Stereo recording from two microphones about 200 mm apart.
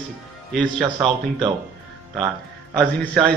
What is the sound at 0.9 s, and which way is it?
Speech, 25° right (ahead or behind).